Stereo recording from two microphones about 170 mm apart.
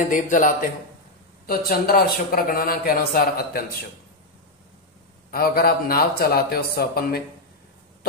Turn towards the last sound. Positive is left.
turn(degrees=65)  # may be behind; listen again after turning